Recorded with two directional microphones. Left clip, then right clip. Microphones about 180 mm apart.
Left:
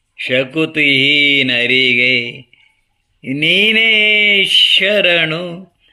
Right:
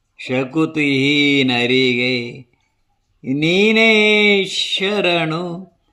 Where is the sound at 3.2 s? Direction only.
15° right (ahead or behind).